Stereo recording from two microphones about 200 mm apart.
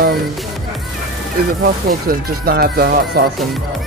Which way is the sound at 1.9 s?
50° right (ahead or behind).